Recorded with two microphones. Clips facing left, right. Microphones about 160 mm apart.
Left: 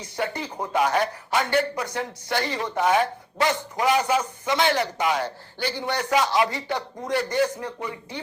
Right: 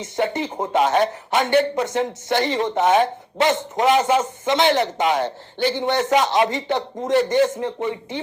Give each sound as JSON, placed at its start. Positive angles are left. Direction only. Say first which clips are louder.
{"t": 0.0, "sound": "speech", "louder": "right 6 dB", "side_deg": -20}